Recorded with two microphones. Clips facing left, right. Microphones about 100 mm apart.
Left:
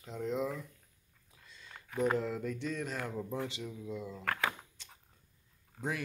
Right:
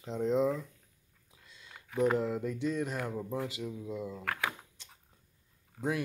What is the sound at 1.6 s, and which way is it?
Speech, 10° right (ahead or behind).